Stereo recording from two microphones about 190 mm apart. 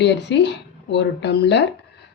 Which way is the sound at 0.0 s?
65° left (ahead or behind).